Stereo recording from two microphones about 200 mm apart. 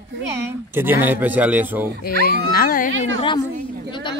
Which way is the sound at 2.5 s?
45° left (ahead or behind).